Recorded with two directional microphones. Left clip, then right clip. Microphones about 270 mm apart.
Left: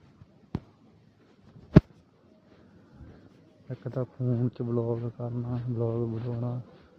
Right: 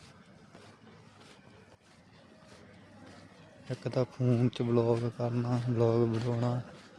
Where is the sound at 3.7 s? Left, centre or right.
Right.